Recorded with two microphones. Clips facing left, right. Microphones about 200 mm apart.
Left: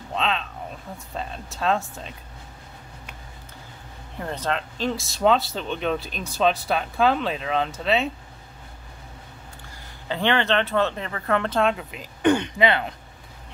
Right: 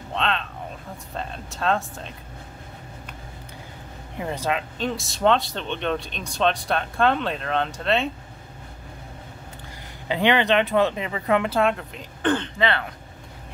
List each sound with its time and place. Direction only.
0.1 s a sound: centre (ahead or behind)
1.1 s speech: centre (ahead or behind)
4.2 s speech: 10° right (ahead or behind)
10.0 s speech: 15° right (ahead or behind)
11.7 s speech: 5° left (ahead or behind)